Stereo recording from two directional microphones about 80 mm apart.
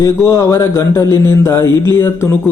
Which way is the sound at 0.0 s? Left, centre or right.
Left.